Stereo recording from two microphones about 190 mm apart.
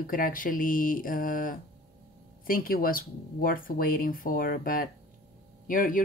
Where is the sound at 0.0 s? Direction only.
50° left (ahead or behind).